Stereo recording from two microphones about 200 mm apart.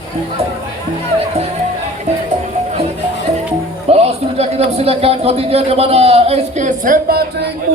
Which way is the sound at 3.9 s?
30° right (ahead or behind).